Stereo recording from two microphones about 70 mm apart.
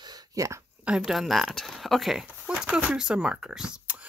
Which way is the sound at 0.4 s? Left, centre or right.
Right.